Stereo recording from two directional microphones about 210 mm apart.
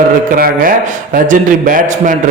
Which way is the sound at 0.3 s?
45° right (ahead or behind).